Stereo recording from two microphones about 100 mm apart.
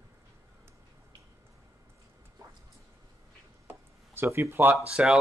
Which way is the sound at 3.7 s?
20° right (ahead or behind).